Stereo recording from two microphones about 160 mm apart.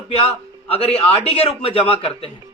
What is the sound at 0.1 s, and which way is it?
A man's voice, 35° left (ahead or behind).